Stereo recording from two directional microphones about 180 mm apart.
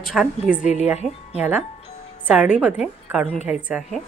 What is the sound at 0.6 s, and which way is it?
Speech, 40° left (ahead or behind).